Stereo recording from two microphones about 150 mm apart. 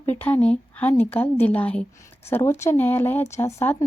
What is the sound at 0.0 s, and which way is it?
Speech, 10° left (ahead or behind).